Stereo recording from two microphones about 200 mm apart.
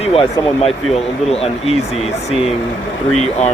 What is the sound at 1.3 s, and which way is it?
Speech, 30° left (ahead or behind).